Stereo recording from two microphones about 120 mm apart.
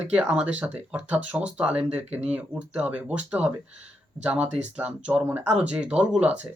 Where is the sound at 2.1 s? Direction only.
65° right (ahead or behind).